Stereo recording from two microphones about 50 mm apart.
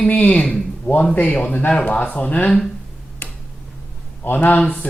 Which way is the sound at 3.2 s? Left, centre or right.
Left.